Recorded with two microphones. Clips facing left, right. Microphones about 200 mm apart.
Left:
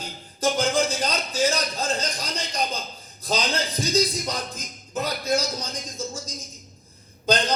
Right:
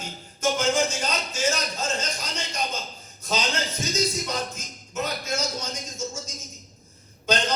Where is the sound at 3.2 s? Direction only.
35° left (ahead or behind).